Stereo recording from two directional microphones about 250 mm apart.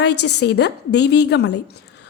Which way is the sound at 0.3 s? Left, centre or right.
Left.